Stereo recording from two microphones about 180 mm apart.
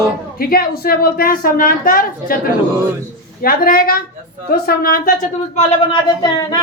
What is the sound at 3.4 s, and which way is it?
A woman's voice, 55° left (ahead or behind).